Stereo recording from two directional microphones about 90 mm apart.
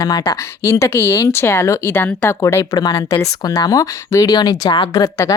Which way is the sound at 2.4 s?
35° left (ahead or behind).